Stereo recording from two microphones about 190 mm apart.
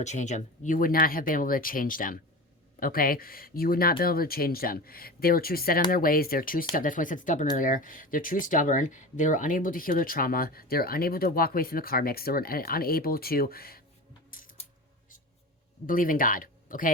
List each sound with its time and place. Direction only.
0.0 s speech: 40° left (ahead or behind)
14.3 s a sound: 45° left (ahead or behind)
15.9 s speech: 45° left (ahead or behind)